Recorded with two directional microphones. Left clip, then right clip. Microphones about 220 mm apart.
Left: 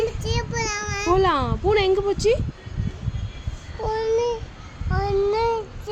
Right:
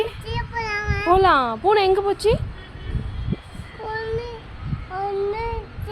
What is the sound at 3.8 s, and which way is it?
Child singing, 30° left (ahead or behind).